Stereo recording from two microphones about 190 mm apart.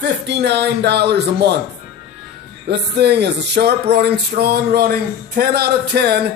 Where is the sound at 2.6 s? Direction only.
60° right (ahead or behind).